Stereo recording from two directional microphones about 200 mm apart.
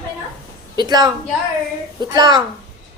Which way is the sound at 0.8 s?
20° right (ahead or behind).